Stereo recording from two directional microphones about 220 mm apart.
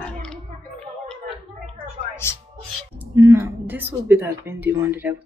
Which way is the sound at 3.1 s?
10° right (ahead or behind).